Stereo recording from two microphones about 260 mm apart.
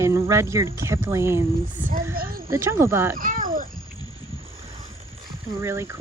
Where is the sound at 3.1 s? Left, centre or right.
Right.